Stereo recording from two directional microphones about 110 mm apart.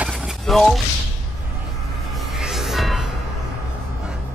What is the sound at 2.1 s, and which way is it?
Music, 5° right (ahead or behind).